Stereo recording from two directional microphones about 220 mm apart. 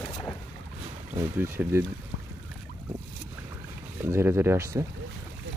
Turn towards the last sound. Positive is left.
turn(degrees=-10)  # may be behind; listen again after turning